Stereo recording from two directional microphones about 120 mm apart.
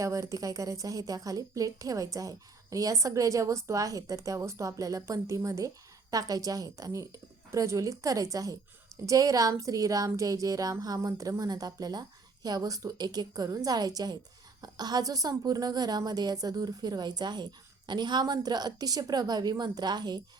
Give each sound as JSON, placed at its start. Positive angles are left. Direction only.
{"t": 0.0, "sound": "a woman's voice", "side_deg": -25}